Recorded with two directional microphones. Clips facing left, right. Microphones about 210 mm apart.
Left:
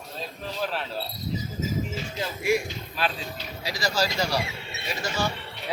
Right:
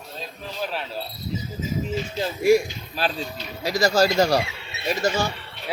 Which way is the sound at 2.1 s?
40° right (ahead or behind).